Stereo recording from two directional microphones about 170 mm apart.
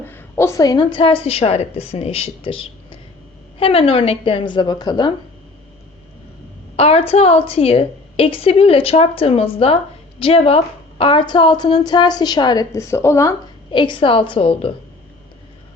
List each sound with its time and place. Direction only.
0.0 s a woman's voice: 10° left (ahead or behind)
6.7 s a woman's voice: 35° left (ahead or behind); by 13.3 s 15° left (ahead or behind)
13.7 s a woman's voice: 30° left (ahead or behind)